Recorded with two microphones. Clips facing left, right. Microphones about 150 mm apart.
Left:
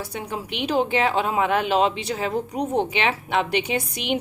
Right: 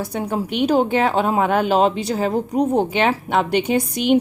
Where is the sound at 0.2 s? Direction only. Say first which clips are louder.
Right 9 dB; 45° right (ahead or behind).